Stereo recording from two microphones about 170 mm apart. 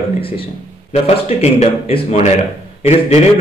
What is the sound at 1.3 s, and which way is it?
A man's voice, 35° left (ahead or behind).